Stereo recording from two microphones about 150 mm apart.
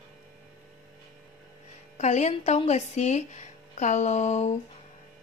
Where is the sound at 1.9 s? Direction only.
50° left (ahead or behind).